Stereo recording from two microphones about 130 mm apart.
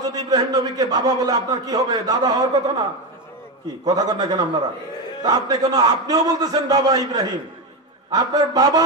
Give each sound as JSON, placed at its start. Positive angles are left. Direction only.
{"t": 0.0, "sound": "a man's voice", "side_deg": -30}
{"t": 3.8, "sound": "a man's voice", "side_deg": -30}